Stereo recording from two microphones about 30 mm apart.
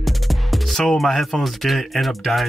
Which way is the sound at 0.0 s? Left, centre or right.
Centre.